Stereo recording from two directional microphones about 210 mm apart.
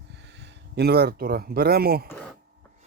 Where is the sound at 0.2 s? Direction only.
55° right (ahead or behind).